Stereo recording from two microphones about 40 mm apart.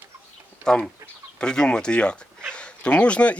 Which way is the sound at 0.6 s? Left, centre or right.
Centre.